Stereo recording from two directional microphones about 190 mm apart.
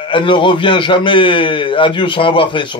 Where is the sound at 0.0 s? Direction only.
25° left (ahead or behind).